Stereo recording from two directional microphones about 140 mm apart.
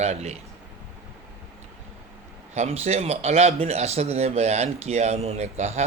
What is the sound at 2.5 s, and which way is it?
A man's voice, 50° right (ahead or behind).